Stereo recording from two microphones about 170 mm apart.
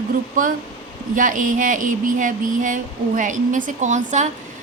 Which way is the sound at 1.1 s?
50° right (ahead or behind).